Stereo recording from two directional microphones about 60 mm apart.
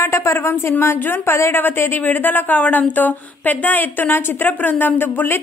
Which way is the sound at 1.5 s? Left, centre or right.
Left.